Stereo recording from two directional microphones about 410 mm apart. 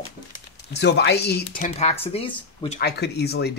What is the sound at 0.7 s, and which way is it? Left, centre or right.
Speech, left.